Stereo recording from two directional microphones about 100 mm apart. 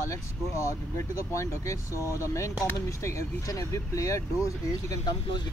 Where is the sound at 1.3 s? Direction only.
30° left (ahead or behind).